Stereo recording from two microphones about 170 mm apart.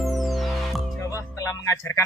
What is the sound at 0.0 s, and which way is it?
Music, centre (ahead or behind).